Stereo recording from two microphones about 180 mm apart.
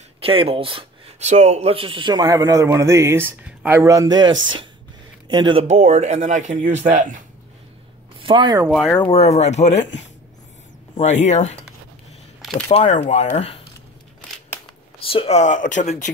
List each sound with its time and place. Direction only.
0.2 s speech: 30° right (ahead or behind)
4.3 s speech: 90° right
5.3 s speech: 25° right (ahead or behind); by 7.2 s 45° right (ahead or behind)
8.2 s speech: 25° right (ahead or behind)
8.7 s speech: 5° left (ahead or behind)
9.0 s speech: 35° left (ahead or behind)
11.0 s speech: 40° left (ahead or behind)
12.5 s speech: 40° left (ahead or behind)
15.0 s speech: 35° left (ahead or behind)